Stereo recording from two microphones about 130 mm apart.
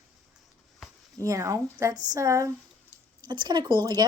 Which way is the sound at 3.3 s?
35° right (ahead or behind).